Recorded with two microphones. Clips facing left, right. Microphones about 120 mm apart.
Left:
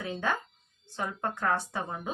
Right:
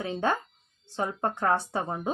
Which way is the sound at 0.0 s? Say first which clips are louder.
Right 4 dB; 30° right (ahead or behind).